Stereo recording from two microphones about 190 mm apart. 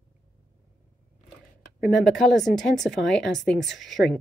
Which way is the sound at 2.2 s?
Centre (ahead or behind).